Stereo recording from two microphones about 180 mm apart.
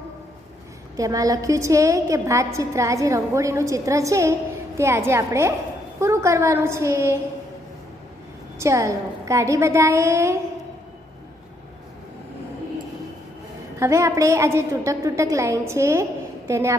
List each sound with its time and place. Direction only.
0.9 s a woman's voice: 20° right (ahead or behind)
8.5 s a woman's voice: 15° right (ahead or behind)
13.7 s a woman's voice: 15° right (ahead or behind)